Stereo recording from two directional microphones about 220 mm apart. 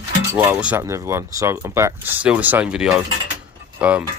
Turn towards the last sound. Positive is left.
turn(degrees=-5)  # may be behind; listen again after turning